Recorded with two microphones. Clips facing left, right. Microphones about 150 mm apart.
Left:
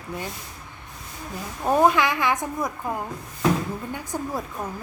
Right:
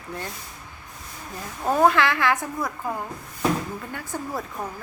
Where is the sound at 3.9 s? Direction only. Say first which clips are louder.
Even; 15° left (ahead or behind).